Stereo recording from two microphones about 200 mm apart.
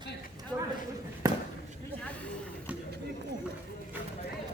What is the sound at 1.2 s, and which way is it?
Basketball bounce, 15° right (ahead or behind).